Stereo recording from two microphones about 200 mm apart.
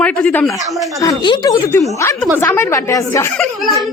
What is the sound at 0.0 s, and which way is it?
Speech, 5° left (ahead or behind).